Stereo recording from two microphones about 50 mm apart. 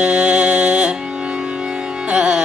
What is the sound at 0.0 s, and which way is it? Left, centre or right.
Music, centre.